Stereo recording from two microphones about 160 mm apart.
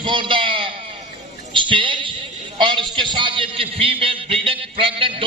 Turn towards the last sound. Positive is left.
turn(degrees=-35)  # may be behind; listen again after turning